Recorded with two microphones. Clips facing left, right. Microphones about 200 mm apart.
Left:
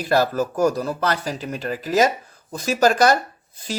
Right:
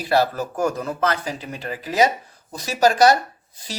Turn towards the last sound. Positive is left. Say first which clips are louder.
# right 1 dB
turn(degrees=50)  # may be behind; listen again after turning